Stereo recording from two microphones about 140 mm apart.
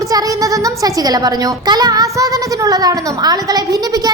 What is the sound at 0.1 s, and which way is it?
A child's voice, 25° right (ahead or behind).